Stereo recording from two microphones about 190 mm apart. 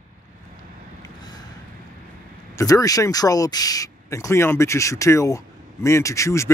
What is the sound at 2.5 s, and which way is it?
Speech, 20° left (ahead or behind).